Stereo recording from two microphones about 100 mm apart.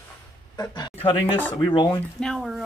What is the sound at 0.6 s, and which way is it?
Speech, 45° left (ahead or behind).